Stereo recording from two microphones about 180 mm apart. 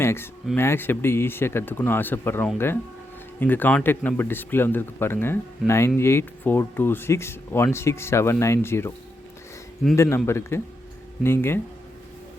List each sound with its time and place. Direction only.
0.0 s speech: 15° left (ahead or behind)
9.9 s speech: 15° left (ahead or behind)